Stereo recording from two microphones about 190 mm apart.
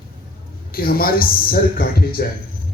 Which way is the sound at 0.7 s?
50° left (ahead or behind).